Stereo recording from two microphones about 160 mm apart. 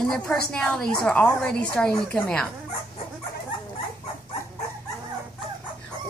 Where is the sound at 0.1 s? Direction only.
5° left (ahead or behind).